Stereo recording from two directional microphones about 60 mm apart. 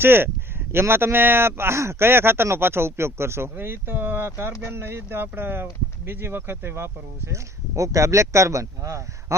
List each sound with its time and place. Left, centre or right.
0.0 s speech: right
7.8 s speech: right